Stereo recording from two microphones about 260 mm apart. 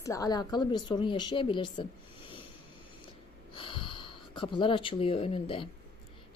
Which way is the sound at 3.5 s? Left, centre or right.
Centre.